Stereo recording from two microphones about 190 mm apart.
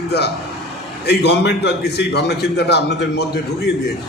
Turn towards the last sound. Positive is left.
turn(degrees=60)  # may be behind; listen again after turning